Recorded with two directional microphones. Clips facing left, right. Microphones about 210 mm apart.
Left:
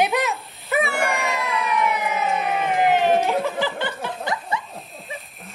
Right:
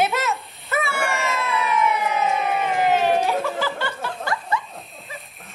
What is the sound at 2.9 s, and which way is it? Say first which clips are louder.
Snicker: left 1 dB; 15° left (ahead or behind).